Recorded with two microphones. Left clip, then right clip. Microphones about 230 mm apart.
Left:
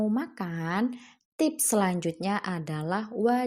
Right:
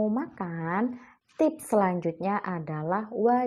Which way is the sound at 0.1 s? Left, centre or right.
Left.